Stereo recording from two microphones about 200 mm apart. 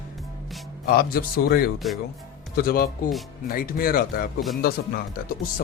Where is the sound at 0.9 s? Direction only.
50° left (ahead or behind).